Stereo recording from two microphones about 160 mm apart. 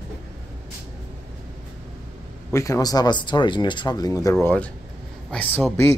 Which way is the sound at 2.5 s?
20° left (ahead or behind).